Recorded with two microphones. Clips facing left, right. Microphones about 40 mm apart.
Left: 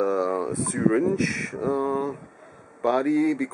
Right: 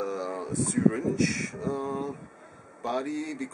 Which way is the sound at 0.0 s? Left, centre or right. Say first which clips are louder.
Left 8 dB; centre.